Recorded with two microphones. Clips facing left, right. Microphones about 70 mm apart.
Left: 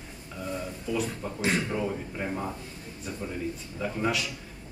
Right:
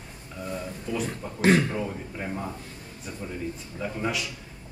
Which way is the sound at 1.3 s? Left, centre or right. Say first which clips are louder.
Right 8 dB; right.